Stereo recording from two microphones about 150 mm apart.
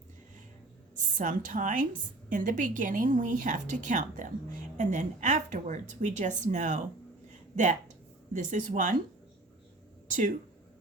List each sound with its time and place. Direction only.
0.9 s a woman's voice: 60° right (ahead or behind)
10.1 s speech: 60° right (ahead or behind)